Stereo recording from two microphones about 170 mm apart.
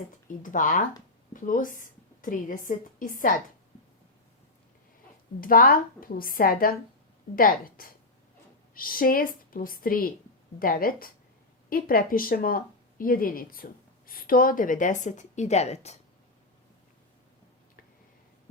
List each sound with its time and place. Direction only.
0.4 s a woman's voice: 50° left (ahead or behind)
5.4 s a woman's voice: 60° left (ahead or behind); by 16.0 s 40° left (ahead or behind)